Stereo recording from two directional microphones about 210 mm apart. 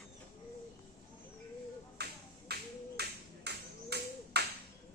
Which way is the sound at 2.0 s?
50° right (ahead or behind).